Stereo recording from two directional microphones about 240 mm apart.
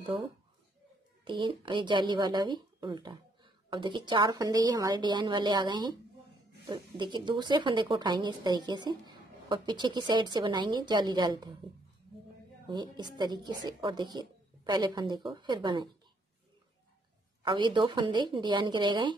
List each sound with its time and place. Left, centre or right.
0.0 s a woman's voice: right
12.6 s a woman's voice: centre
17.4 s a woman's voice: centre